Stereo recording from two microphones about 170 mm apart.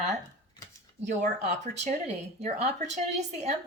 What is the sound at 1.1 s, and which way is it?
A woman's voice, 45° right (ahead or behind).